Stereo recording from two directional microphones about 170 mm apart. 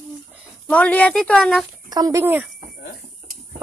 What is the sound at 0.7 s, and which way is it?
Speech, 10° left (ahead or behind).